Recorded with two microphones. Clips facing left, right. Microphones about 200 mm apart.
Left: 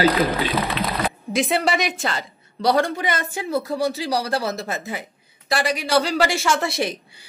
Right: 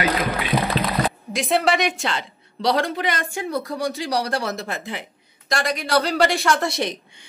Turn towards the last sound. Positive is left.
turn(degrees=0)  # may be behind; listen again after turning